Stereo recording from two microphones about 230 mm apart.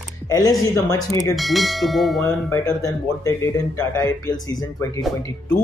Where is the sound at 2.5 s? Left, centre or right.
Centre.